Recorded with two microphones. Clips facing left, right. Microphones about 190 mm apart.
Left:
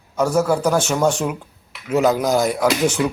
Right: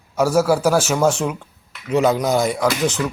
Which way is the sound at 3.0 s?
15° left (ahead or behind).